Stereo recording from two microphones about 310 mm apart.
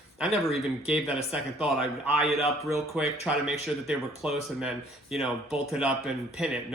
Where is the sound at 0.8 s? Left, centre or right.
Centre.